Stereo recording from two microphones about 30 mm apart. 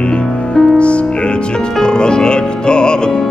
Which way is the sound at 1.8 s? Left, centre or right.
Left.